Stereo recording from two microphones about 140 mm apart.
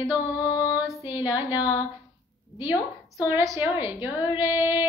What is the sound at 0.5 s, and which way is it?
Female singing, 25° left (ahead or behind).